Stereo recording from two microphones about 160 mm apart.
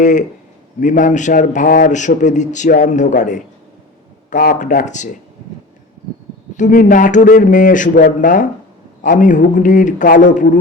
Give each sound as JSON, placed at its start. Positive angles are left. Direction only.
{"t": 0.0, "sound": "speech", "side_deg": 50}
{"t": 1.9, "sound": "speech", "side_deg": 50}
{"t": 6.6, "sound": "speech", "side_deg": 55}